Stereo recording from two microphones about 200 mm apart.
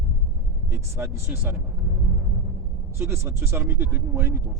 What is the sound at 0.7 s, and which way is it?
Speech, 15° right (ahead or behind).